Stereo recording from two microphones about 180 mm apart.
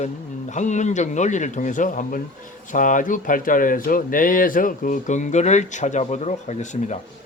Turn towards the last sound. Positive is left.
turn(degrees=40)  # may be behind; listen again after turning